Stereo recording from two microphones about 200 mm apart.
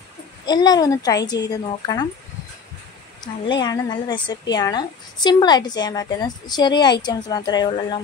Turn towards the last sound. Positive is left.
turn(degrees=20)  # may be behind; listen again after turning